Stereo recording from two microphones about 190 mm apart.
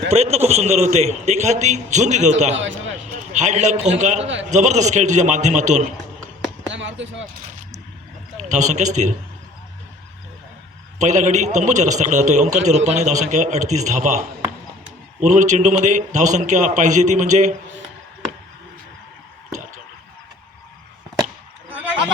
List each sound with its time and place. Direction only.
0.1 s a man's voice: 35° right (ahead or behind)
6.7 s a sound: 75° right (ahead or behind)
8.4 s a man's voice: 40° right (ahead or behind)
10.9 s a man's voice: 40° right (ahead or behind)
19.5 s drip: 40° right (ahead or behind)